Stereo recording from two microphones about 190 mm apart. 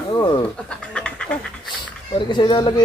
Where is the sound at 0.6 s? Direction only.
5° left (ahead or behind).